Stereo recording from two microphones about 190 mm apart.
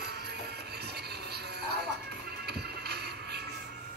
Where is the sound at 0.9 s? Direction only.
60° right (ahead or behind).